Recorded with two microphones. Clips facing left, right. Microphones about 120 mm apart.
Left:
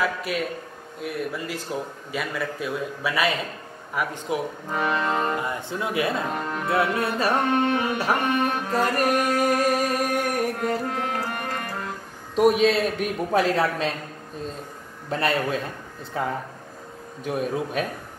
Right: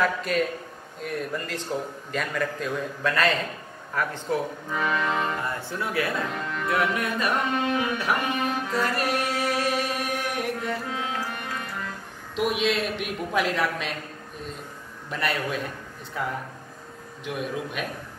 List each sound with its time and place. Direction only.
0.0 s a man's voice: 5° left (ahead or behind)
4.6 s speech: 30° left (ahead or behind)
5.3 s speech: 15° left (ahead or behind)
6.2 s speech: 45° left (ahead or behind)
6.7 s a man's voice: 30° left (ahead or behind)
8.0 s music: 40° left (ahead or behind)
12.4 s a man's voice: 40° left (ahead or behind)
15.0 s a man's voice: 30° left (ahead or behind)
17.2 s a man's voice: 40° left (ahead or behind)